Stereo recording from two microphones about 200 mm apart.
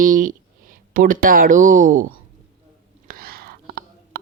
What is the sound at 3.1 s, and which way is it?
Whispering, 50° right (ahead or behind).